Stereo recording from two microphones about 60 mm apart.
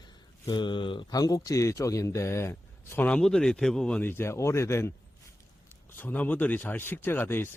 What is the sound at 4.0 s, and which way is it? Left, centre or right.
Speech, left.